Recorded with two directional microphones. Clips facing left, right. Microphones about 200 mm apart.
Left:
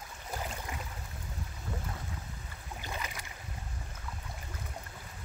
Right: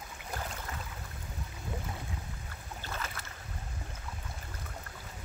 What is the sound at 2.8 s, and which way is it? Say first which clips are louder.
Boat: even; 15° left (ahead or behind).